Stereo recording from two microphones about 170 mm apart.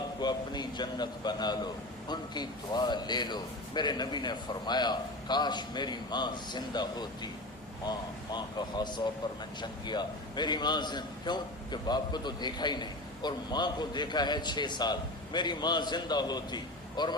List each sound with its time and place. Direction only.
0.2 s a man's voice: 25° left (ahead or behind)